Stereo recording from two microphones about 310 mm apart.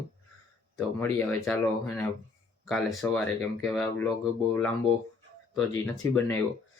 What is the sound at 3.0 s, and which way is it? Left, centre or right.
Speech, centre.